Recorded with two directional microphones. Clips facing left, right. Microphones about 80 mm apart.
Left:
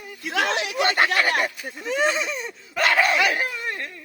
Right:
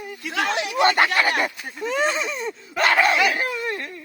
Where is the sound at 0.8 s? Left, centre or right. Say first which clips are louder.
Right 3 dB; right.